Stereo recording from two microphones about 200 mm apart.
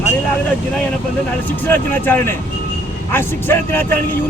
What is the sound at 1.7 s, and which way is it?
Speech, 10° left (ahead or behind).